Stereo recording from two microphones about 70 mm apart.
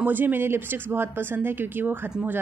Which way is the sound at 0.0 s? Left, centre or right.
Right.